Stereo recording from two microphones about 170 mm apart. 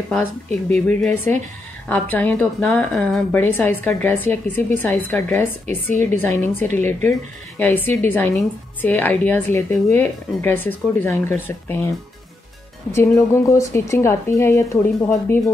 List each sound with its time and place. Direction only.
0.1 s a woman's voice: 10° left (ahead or behind)
13.3 s a woman's voice: 15° left (ahead or behind)